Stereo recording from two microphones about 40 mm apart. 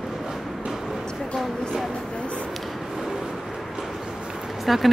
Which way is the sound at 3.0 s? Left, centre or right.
Centre.